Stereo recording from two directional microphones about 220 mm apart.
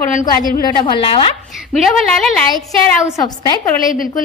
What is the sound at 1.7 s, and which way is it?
Speech, centre (ahead or behind).